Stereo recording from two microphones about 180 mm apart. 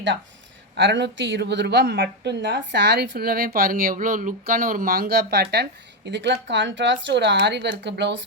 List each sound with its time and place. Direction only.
0.8 s a woman's voice: 75° right (ahead or behind)